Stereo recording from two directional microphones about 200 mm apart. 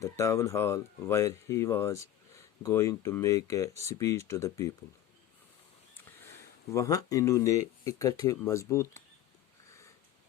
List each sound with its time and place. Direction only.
0.0 s speech: 15° left (ahead or behind)
6.7 s speech: 15° left (ahead or behind)